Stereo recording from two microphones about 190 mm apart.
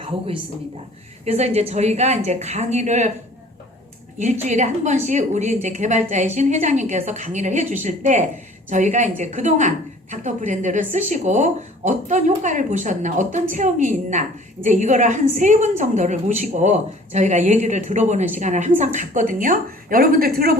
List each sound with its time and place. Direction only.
0.0 s a woman's voice: 30° right (ahead or behind)
4.2 s a woman's voice: 40° right (ahead or behind)